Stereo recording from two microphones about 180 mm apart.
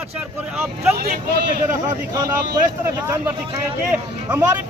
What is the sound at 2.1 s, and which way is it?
Speech, 20° right (ahead or behind).